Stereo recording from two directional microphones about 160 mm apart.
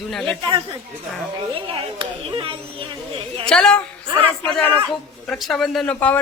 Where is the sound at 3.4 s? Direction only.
5° left (ahead or behind).